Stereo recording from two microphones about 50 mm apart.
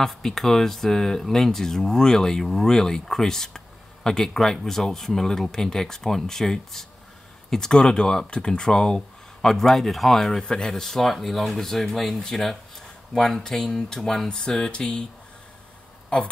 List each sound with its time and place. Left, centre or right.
0.0 s speech: centre
16.1 s speech: centre